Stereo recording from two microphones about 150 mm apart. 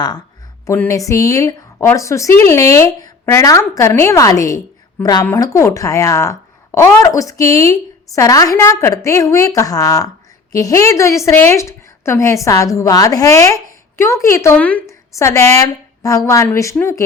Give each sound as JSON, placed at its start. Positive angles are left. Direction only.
{"t": 0.7, "sound": "a woman's voice", "side_deg": 20}